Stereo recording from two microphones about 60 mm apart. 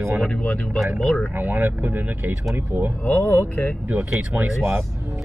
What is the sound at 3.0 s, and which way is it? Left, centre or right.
Speech, left.